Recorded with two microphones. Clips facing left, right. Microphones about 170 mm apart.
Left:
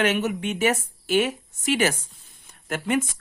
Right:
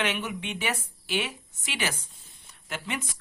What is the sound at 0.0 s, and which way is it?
Speech, 45° left (ahead or behind).